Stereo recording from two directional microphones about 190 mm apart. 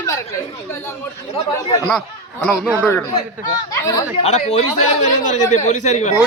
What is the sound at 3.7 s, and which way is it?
Speech, 15° left (ahead or behind).